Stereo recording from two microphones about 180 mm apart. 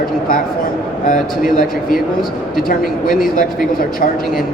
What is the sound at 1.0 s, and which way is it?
Speech, 50° left (ahead or behind).